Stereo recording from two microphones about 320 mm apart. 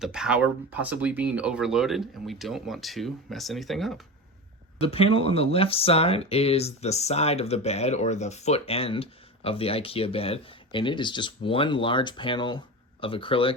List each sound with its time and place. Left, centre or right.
0.0 s speech: centre
4.8 s speech: centre